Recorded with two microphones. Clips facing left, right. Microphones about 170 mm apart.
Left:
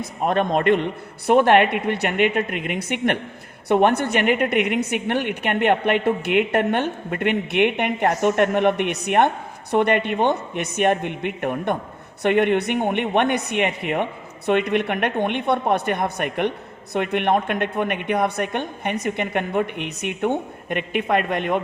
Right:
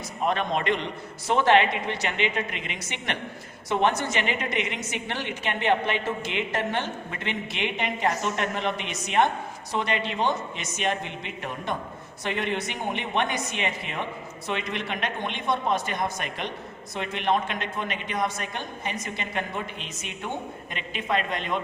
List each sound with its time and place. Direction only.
0.0 s a man's voice: 50° left (ahead or behind)